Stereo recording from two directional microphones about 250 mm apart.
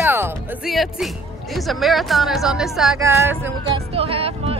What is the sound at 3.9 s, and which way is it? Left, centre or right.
Speech, right.